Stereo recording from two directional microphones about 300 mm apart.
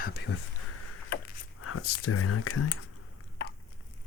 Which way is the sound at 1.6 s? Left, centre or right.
Left.